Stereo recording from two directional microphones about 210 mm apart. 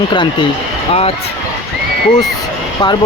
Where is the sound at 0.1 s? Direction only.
20° left (ahead or behind).